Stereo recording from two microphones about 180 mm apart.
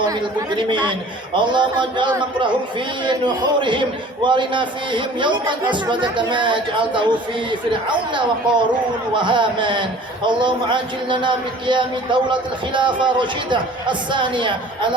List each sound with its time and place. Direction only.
0.0 s speech: 25° right (ahead or behind)